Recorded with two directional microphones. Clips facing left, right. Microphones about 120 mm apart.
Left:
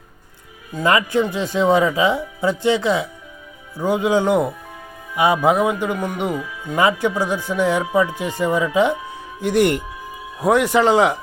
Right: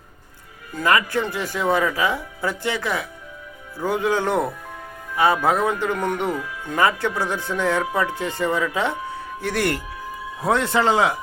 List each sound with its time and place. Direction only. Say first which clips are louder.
0.7 s speech: left 2 dB; 20° left (ahead or behind)